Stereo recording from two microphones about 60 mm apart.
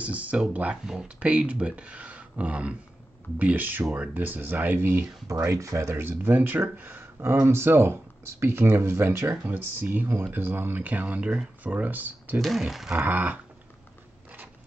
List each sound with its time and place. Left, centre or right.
0.0 s speech: right
5.4 s speech: right
6.2 s speech: right
12.4 s speech: centre
13.0 s speech: right